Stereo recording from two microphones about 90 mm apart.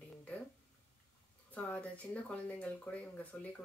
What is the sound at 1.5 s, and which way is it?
Speech, 15° left (ahead or behind).